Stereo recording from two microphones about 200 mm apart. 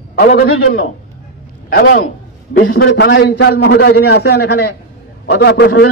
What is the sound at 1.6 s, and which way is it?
A man's voice, 50° left (ahead or behind).